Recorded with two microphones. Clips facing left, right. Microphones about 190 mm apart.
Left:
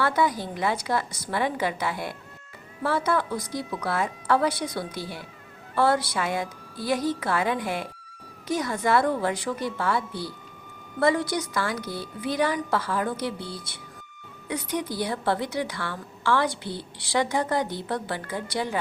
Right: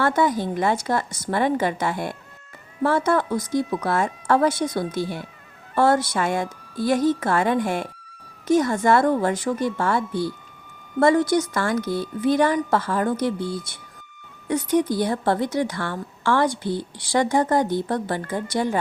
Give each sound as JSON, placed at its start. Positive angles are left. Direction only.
{"t": 0.0, "sound": "a woman's voice", "side_deg": -50}